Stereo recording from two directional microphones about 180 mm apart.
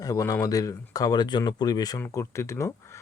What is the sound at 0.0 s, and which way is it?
Speech, 20° left (ahead or behind).